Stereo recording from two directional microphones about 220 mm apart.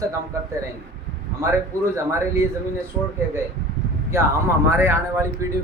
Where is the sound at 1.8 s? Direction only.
10° right (ahead or behind).